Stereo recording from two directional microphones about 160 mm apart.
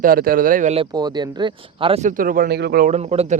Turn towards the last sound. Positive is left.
turn(degrees=-40)  # may be behind; listen again after turning